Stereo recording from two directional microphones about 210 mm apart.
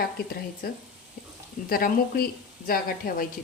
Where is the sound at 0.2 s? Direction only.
50° left (ahead or behind).